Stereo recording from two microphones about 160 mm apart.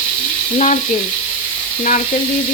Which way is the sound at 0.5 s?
50° left (ahead or behind).